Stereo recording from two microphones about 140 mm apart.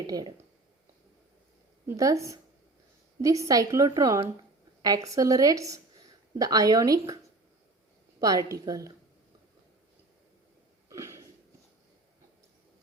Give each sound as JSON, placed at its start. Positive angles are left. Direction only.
{"t": 0.1, "sound": "a woman's voice", "side_deg": -30}
{"t": 2.0, "sound": "a woman's voice", "side_deg": -25}
{"t": 8.2, "sound": "a woman's voice", "side_deg": -25}
{"t": 10.8, "sound": "a sound", "side_deg": -20}